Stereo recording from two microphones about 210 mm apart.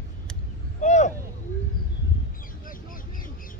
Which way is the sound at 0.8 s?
35° left (ahead or behind).